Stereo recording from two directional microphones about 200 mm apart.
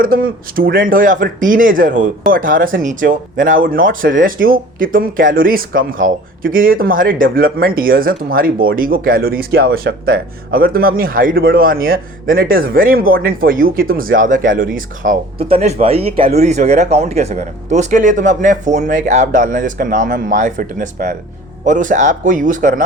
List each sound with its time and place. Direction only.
0.0 s speech: 45° right (ahead or behind)
15.4 s speech: 30° right (ahead or behind)